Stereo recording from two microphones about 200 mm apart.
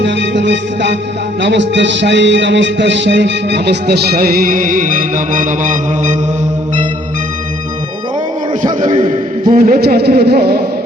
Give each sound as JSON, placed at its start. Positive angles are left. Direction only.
{"t": 0.0, "sound": "music", "side_deg": -60}
{"t": 8.9, "sound": "a sound", "side_deg": -25}
{"t": 9.5, "sound": "a woman's voice", "side_deg": -40}